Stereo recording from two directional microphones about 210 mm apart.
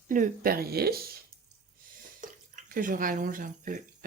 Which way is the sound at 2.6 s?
40° right (ahead or behind).